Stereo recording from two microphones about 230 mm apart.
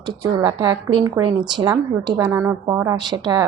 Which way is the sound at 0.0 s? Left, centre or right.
Centre.